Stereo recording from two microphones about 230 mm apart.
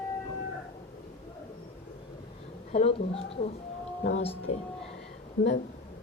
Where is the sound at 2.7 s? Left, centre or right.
Left.